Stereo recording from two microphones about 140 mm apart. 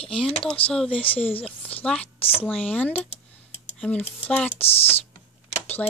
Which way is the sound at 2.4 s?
10° left (ahead or behind).